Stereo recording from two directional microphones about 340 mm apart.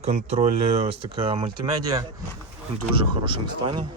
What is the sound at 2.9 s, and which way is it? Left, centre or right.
Speech, centre.